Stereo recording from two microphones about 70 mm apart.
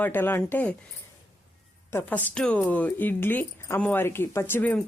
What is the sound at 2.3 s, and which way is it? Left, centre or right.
Speech, centre.